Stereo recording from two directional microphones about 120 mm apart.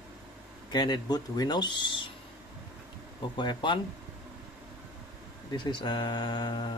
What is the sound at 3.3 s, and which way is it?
Speech, 40° left (ahead or behind).